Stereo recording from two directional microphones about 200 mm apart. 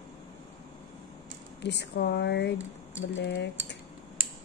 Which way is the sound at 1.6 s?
55° left (ahead or behind).